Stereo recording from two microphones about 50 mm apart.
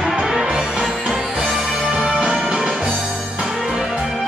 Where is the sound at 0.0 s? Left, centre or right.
Centre.